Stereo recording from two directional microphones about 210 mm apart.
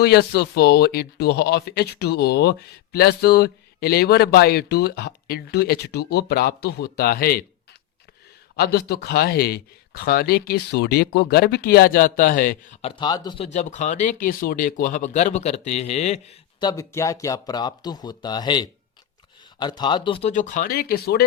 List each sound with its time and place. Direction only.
0.0 s speech: 50° left (ahead or behind)
8.5 s speech: 50° left (ahead or behind)
13.0 s speech: 20° left (ahead or behind)
16.6 s speech: 15° left (ahead or behind); by 21.2 s 50° left (ahead or behind)